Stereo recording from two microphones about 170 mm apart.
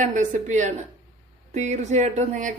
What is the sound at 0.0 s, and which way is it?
A woman's voice, 45° right (ahead or behind).